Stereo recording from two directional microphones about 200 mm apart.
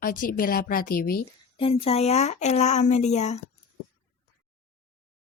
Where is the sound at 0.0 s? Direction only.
45° left (ahead or behind).